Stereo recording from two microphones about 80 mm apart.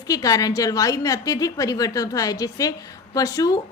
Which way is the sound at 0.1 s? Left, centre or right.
Left.